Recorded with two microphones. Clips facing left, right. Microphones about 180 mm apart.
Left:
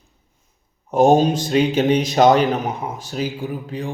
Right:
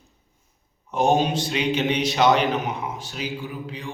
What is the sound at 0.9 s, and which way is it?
A man's voice, 40° left (ahead or behind).